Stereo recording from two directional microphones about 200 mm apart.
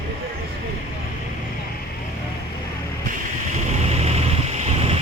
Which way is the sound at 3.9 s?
30° right (ahead or behind).